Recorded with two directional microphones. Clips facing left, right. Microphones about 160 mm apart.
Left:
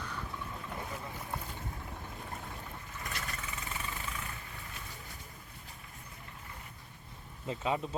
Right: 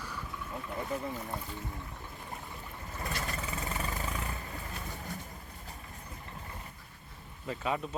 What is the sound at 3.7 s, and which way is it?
Vehicle, 40° right (ahead or behind).